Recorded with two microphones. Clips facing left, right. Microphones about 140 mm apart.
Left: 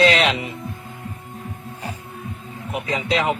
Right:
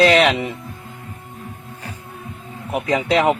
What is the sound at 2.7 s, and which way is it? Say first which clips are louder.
Speech: right 5 dB; 60° right (ahead or behind).